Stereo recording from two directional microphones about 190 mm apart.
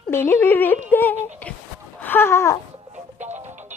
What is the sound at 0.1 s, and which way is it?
Speech, 10° left (ahead or behind).